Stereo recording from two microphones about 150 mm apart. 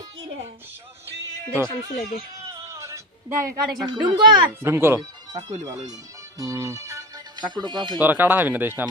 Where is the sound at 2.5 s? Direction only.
20° right (ahead or behind).